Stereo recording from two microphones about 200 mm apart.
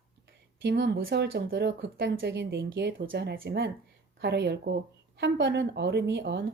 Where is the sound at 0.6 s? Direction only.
60° right (ahead or behind).